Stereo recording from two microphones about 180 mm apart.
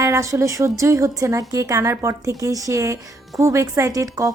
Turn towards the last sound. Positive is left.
turn(degrees=-20)  # may be behind; listen again after turning